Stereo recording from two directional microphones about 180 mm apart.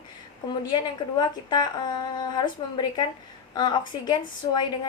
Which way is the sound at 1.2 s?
25° left (ahead or behind).